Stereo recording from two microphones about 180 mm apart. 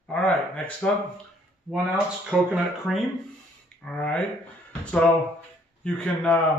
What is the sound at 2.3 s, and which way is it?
Speech, 5° right (ahead or behind).